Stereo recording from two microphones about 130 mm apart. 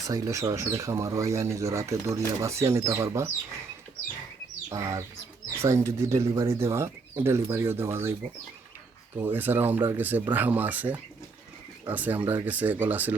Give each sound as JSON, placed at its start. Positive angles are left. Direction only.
{"t": 0.0, "sound": "speech", "side_deg": -25}
{"t": 4.7, "sound": "speech", "side_deg": -25}
{"t": 9.1, "sound": "speech", "side_deg": -15}